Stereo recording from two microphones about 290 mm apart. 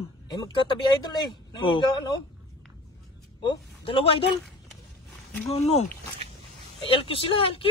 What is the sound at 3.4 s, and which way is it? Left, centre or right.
Speech, centre.